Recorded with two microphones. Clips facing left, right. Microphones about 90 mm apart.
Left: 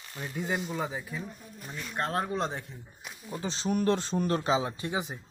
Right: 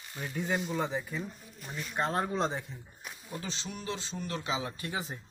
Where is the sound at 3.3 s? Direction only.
30° left (ahead or behind).